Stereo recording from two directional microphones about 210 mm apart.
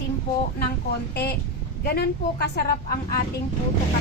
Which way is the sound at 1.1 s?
50° left (ahead or behind).